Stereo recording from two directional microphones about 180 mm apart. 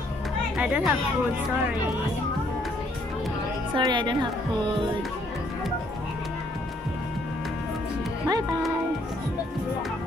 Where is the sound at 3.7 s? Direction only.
25° right (ahead or behind).